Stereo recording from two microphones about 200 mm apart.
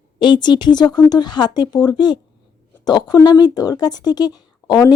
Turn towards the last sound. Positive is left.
turn(degrees=20)  # may be behind; listen again after turning